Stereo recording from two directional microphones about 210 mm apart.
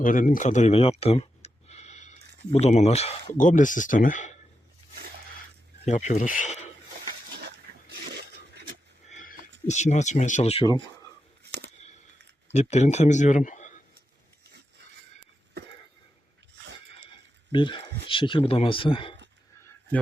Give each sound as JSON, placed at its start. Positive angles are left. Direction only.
{"t": 0.0, "sound": "speech", "side_deg": 40}
{"t": 5.8, "sound": "speech", "side_deg": 35}
{"t": 7.3, "sound": "dog", "side_deg": -50}
{"t": 9.0, "sound": "a sound", "side_deg": 40}
{"t": 9.6, "sound": "speech", "side_deg": 35}
{"t": 12.5, "sound": "speech", "side_deg": 30}
{"t": 16.6, "sound": "neigh", "side_deg": -55}
{"t": 17.5, "sound": "speech", "side_deg": 25}